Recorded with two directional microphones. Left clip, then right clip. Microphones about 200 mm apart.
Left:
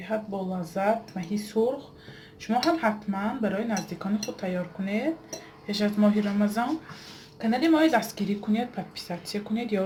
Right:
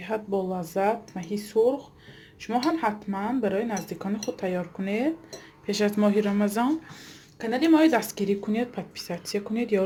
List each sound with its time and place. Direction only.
0.0 s speech: 45° right (ahead or behind); by 9.8 s 25° right (ahead or behind)